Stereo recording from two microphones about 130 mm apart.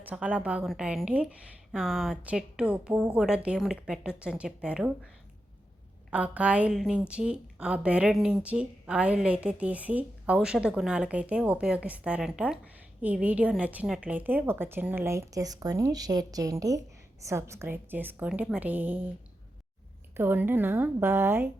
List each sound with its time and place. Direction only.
0.0 s speech: 10° right (ahead or behind)
6.1 s speech: 10° right (ahead or behind)
20.1 s speech: 15° right (ahead or behind)